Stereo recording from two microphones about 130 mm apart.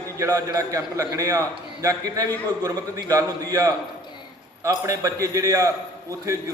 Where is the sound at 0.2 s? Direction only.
25° right (ahead or behind).